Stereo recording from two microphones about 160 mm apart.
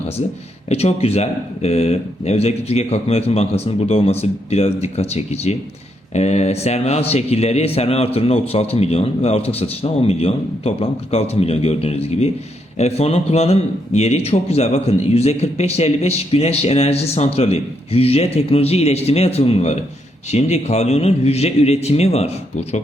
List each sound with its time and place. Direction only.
0.7 s speech: 40° left (ahead or behind)